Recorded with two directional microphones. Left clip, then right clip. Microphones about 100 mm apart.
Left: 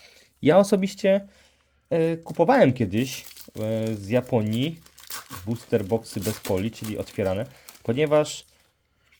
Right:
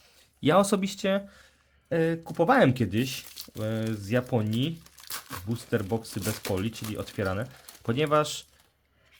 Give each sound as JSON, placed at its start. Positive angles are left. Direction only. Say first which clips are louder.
{"t": 0.0, "sound": "a sound", "louder": "left 5 dB", "side_deg": 30}
{"t": 0.6, "sound": "speech", "louder": "left 5 dB", "side_deg": 20}
{"t": 4.8, "sound": "crumpling", "louder": "left 1 dB", "side_deg": 5}
{"t": 6.2, "sound": "speech", "louder": "left 4 dB", "side_deg": 25}